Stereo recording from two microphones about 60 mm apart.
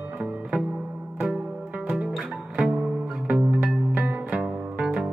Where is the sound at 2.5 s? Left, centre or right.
Centre.